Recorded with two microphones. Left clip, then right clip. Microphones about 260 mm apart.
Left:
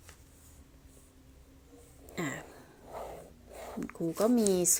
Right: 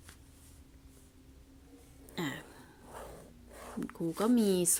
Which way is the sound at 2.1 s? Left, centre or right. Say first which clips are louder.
Left 1 dB; centre.